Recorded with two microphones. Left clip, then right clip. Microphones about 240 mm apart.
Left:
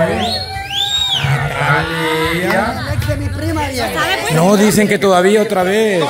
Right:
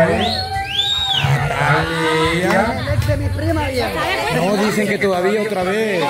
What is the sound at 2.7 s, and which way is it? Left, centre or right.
Chatter, left.